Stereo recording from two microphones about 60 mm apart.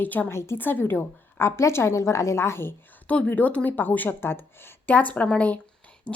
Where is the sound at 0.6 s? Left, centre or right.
Left.